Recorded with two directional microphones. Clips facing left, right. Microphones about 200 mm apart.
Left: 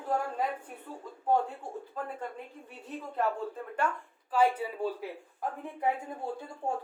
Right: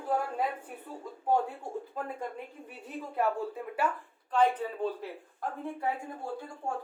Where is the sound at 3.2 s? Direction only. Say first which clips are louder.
Right 1 dB; 10° right (ahead or behind).